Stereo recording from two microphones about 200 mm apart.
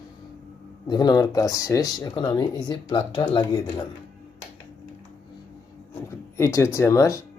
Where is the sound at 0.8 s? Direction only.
20° left (ahead or behind).